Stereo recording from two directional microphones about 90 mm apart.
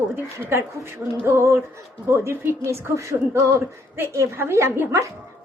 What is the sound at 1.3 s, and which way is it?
A child's voice, 30° right (ahead or behind).